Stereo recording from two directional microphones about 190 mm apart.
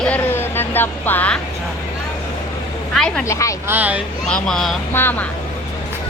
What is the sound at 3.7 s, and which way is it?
Speech, 10° right (ahead or behind).